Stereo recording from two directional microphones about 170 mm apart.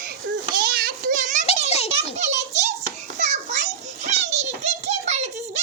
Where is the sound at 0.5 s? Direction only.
60° right (ahead or behind).